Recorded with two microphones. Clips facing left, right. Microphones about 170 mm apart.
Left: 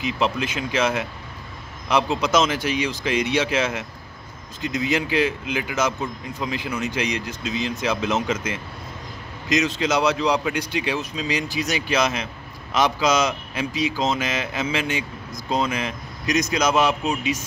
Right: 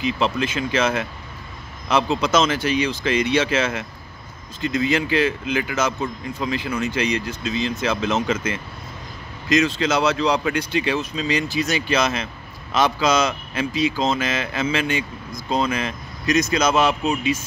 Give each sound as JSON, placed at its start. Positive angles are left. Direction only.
{"t": 0.0, "sound": "speech", "side_deg": 10}